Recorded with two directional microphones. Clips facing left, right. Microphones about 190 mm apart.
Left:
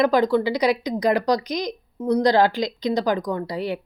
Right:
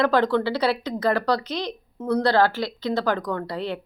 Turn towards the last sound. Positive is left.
turn(degrees=10)  # may be behind; listen again after turning